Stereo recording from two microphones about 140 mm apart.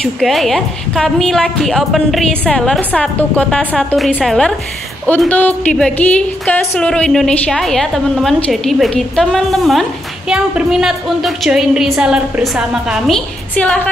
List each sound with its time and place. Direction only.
0.0 s a woman's voice: centre (ahead or behind)
13.6 s speech: 10° left (ahead or behind)